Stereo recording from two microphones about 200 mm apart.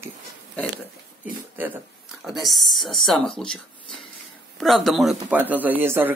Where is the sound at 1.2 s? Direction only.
5° right (ahead or behind).